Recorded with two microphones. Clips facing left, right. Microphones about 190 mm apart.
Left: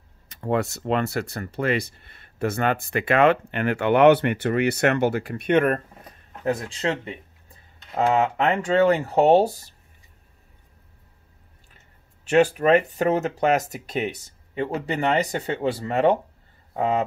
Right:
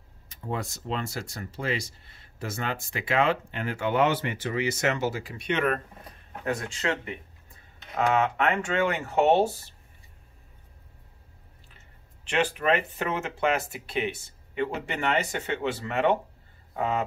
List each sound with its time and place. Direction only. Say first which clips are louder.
0.3 s speech: left 9 dB; 70° left (ahead or behind); by 5.8 s 50° left (ahead or behind)
6.4 s speech: left 5 dB; 35° left (ahead or behind)
12.3 s speech: left 8 dB; 40° left (ahead or behind)